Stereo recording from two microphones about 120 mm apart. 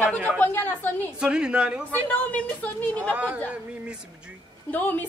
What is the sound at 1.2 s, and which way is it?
Speech, 10° right (ahead or behind).